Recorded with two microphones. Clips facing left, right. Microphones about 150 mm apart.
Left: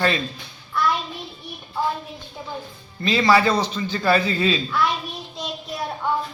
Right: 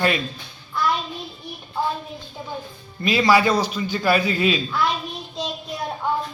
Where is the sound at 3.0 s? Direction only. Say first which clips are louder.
Even; 15° right (ahead or behind).